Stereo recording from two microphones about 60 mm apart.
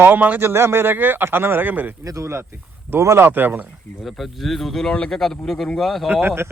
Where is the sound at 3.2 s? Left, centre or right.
Right.